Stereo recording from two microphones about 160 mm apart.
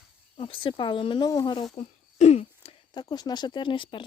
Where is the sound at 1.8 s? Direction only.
40° left (ahead or behind).